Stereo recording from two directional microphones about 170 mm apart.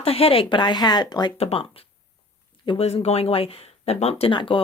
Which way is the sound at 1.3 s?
35° left (ahead or behind).